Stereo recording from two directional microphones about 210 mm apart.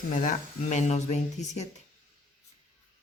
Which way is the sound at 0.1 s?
35° left (ahead or behind).